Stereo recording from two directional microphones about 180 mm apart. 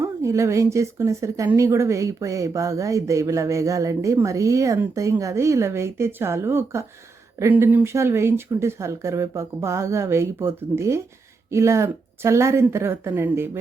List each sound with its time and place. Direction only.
0.0 s speech: 15° right (ahead or behind)